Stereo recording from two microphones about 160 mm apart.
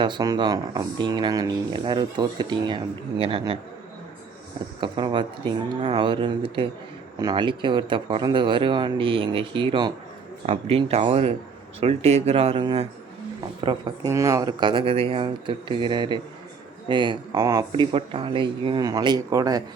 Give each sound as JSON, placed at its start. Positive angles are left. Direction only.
{"t": 0.0, "sound": "speech", "side_deg": -25}
{"t": 4.8, "sound": "speech", "side_deg": -30}
{"t": 14.1, "sound": "speech", "side_deg": -20}
{"t": 17.7, "sound": "speech", "side_deg": -35}